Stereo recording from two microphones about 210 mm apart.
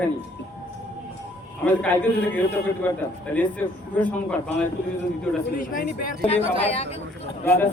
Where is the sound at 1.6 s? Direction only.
5° left (ahead or behind).